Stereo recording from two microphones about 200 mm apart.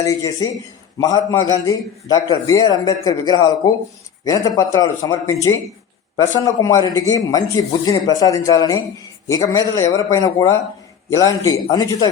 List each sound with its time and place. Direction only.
0.0 s a man's voice: 15° left (ahead or behind)
6.4 s speech: 15° left (ahead or behind)